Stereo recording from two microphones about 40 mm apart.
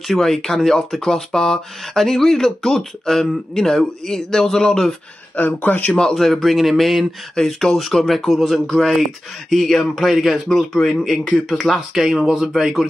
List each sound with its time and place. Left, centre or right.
0.1 s a man's voice: centre
5.3 s speech: left
6.1 s a man's voice: centre
11.9 s speech: centre